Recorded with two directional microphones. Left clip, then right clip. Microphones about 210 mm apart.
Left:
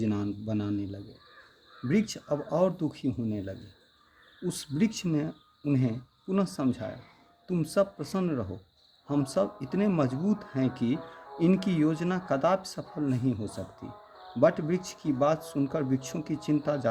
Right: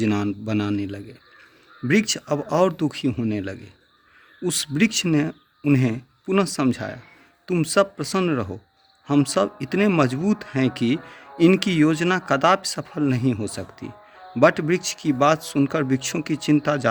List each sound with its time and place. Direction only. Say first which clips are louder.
0.0 s speech: right 9 dB; 30° right (ahead or behind)